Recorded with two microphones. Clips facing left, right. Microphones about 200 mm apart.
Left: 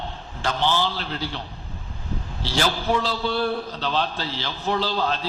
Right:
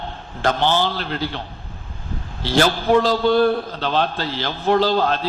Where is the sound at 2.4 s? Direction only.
55° right (ahead or behind).